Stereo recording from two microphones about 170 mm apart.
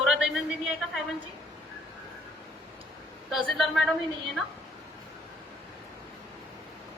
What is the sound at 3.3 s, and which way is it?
Speech, centre (ahead or behind).